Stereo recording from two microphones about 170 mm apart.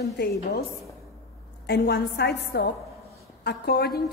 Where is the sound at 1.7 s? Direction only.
70° left (ahead or behind).